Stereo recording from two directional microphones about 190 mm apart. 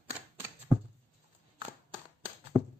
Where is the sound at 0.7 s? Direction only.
25° right (ahead or behind).